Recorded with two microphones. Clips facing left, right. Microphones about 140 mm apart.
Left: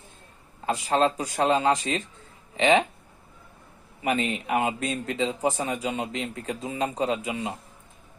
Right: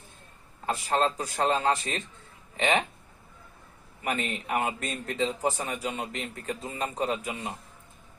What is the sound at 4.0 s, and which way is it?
A man's voice, 20° left (ahead or behind).